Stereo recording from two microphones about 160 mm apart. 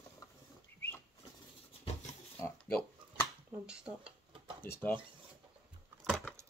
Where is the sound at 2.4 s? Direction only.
10° left (ahead or behind).